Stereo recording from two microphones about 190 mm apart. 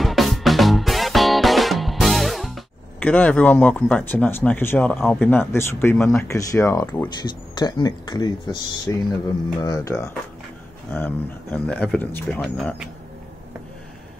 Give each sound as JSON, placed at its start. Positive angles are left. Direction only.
{"t": 0.0, "sound": "music", "side_deg": 0}
{"t": 5.1, "sound": "speech", "side_deg": 10}
{"t": 7.2, "sound": "speech", "side_deg": 25}